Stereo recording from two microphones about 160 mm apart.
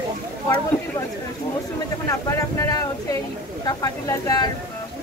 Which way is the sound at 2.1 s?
20° left (ahead or behind).